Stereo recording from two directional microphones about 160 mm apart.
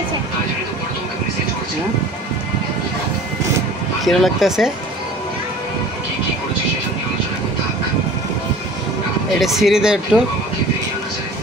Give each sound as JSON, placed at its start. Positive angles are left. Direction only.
{"t": 4.0, "sound": "speech", "side_deg": 0}
{"t": 9.4, "sound": "speech", "side_deg": 0}